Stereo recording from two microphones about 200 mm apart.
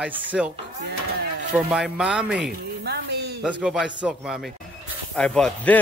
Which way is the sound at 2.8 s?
55° right (ahead or behind).